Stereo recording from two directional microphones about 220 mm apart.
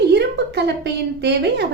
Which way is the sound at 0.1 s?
50° right (ahead or behind).